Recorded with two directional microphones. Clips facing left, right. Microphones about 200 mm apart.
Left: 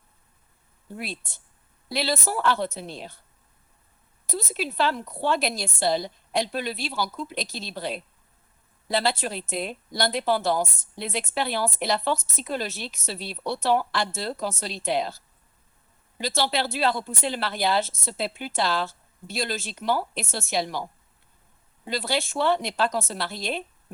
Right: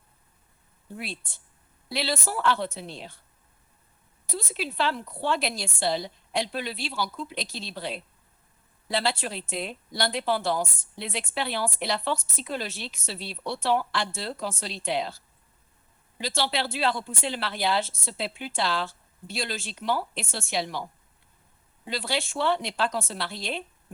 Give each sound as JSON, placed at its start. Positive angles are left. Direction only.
{"t": 0.9, "sound": "speech", "side_deg": 40}
{"t": 4.3, "sound": "speech", "side_deg": 40}
{"t": 21.8, "sound": "speech", "side_deg": 40}